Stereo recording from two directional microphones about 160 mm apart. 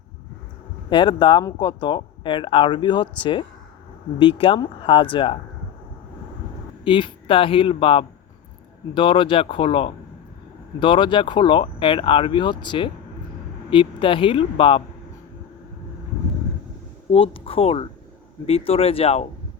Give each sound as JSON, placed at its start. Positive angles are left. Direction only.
{"t": 0.9, "sound": "speech", "side_deg": 30}
{"t": 6.8, "sound": "speech", "side_deg": 30}
{"t": 17.1, "sound": "speech", "side_deg": 35}